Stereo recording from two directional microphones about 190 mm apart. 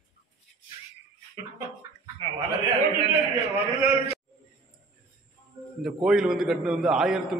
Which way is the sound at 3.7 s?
15° right (ahead or behind).